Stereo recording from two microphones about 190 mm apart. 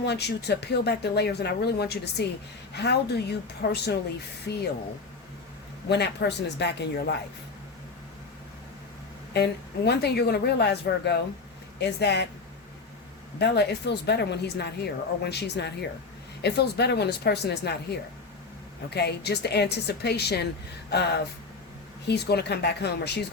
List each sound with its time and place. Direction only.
0.0 s a woman's voice: 60° left (ahead or behind)
5.9 s a woman's voice: 60° left (ahead or behind)
9.3 s a woman's voice: 60° left (ahead or behind)
13.4 s a woman's voice: 60° left (ahead or behind)
18.9 s a woman's voice: 60° left (ahead or behind)